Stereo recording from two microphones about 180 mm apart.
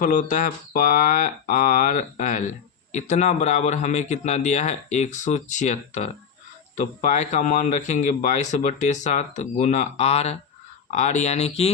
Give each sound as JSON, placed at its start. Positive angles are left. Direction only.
{"t": 0.0, "sound": "a man's voice", "side_deg": 45}